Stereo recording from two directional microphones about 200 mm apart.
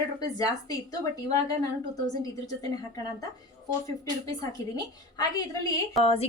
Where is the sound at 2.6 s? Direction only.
15° left (ahead or behind).